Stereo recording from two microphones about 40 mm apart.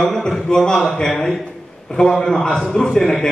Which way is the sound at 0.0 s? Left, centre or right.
Centre.